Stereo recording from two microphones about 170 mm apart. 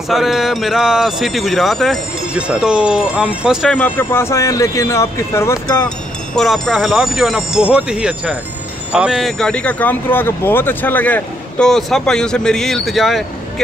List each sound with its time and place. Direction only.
0.1 s a man's voice: centre (ahead or behind)
3.7 s speech: 10° left (ahead or behind)
6.3 s a man's voice: centre (ahead or behind)